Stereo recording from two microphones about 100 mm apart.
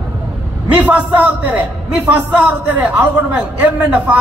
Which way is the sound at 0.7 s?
15° right (ahead or behind).